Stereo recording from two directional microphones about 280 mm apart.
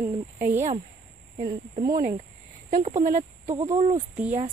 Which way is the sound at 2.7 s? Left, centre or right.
Right.